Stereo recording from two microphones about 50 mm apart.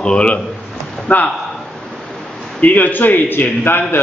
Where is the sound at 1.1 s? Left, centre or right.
Left.